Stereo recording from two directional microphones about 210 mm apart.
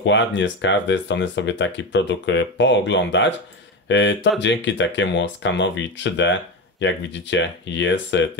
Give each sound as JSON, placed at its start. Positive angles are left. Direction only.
{"t": 0.0, "sound": "speech", "side_deg": 60}